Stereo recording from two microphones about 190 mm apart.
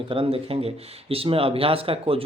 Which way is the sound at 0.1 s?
30° right (ahead or behind).